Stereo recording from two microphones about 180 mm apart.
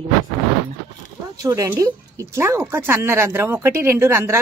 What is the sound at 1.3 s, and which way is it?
Speech, 20° right (ahead or behind).